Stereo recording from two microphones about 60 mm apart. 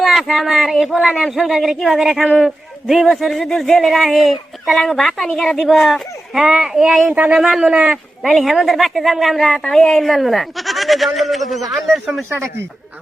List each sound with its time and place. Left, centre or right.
0.0 s a sound: centre
0.3 s a man's voice: centre
7.1 s speech: right
7.3 s a man's voice: centre
8.3 s speech: centre
12.3 s speech: right